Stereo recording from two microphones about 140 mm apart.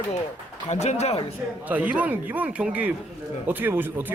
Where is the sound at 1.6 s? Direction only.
10° right (ahead or behind).